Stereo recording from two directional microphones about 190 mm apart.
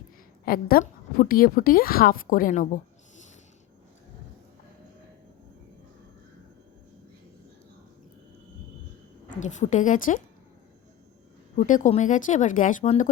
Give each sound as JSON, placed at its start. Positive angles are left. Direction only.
{"t": 0.4, "sound": "a woman's voice", "side_deg": 50}
{"t": 9.4, "sound": "speech", "side_deg": 40}
{"t": 11.5, "sound": "speech", "side_deg": 40}